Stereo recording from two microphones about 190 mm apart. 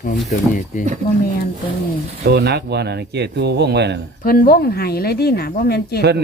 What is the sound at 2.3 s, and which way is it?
Speech, 60° right (ahead or behind).